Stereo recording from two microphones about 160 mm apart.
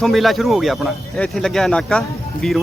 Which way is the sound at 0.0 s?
Centre (ahead or behind).